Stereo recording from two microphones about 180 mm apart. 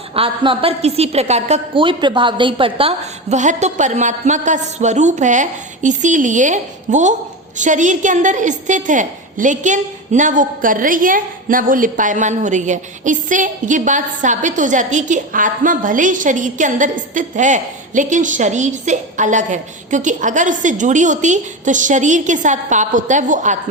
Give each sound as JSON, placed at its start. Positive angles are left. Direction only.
{"t": 0.1, "sound": "a woman's voice", "side_deg": -30}